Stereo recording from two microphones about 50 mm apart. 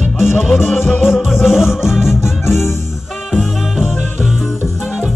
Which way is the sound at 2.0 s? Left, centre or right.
Left.